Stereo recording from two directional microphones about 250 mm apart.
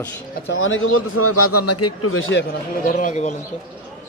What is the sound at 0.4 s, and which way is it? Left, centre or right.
A man's voice, left.